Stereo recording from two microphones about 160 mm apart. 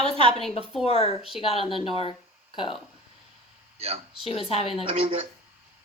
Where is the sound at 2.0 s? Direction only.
35° left (ahead or behind).